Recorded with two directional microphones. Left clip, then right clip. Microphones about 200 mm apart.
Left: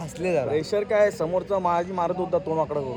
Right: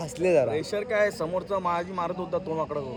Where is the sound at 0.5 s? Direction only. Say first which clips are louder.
Left 4 dB; 25° left (ahead or behind).